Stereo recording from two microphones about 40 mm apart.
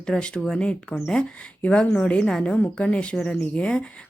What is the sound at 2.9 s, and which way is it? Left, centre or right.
Speech, left.